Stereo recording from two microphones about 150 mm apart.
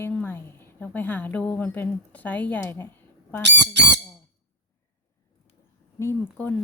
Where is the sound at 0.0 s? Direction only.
10° left (ahead or behind).